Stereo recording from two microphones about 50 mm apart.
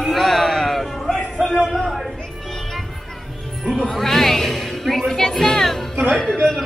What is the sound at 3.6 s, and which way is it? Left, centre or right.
A man's voice, centre.